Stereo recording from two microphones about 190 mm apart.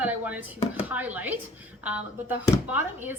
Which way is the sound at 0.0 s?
10° right (ahead or behind).